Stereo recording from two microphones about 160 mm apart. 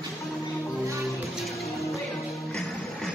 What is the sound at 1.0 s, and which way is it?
Music, centre (ahead or behind).